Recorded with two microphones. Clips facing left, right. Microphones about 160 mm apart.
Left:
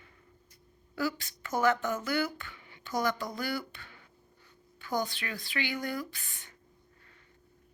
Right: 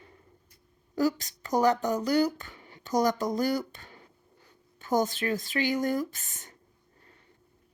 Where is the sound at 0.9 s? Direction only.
40° right (ahead or behind).